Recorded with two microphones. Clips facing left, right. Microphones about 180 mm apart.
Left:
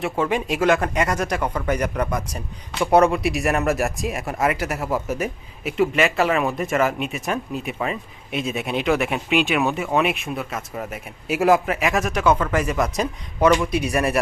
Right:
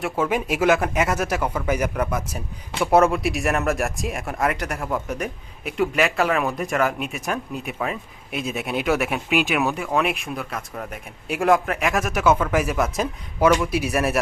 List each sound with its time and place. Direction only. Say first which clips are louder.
0.0 s speech: left 1 dB; 5° right (ahead or behind)